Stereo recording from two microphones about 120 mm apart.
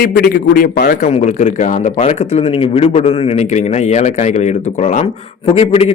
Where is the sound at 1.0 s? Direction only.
75° left (ahead or behind).